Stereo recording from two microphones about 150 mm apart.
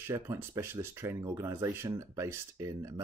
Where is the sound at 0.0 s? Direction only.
15° right (ahead or behind).